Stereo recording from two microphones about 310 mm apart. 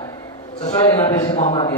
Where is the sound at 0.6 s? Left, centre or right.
Centre.